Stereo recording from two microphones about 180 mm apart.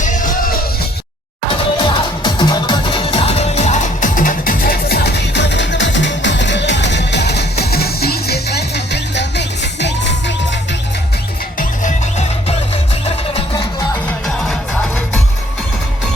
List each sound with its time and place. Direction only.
0.0 s music: 45° left (ahead or behind)
1.8 s music: 25° left (ahead or behind); by 10.8 s 75° left (ahead or behind)
11.5 s music: 45° left (ahead or behind)